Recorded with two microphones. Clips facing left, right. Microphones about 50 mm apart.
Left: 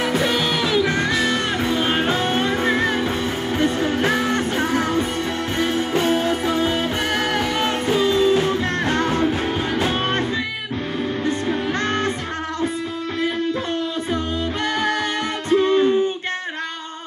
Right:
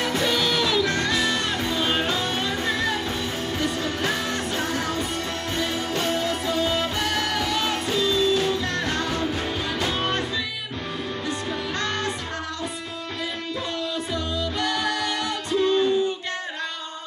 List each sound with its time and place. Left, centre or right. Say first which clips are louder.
0.0 s music: left 3 dB; centre; by 10.2 s left
14.1 s music: left 4 dB; left